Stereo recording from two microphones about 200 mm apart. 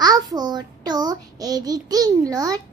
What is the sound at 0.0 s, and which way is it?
A child's voice, 20° right (ahead or behind).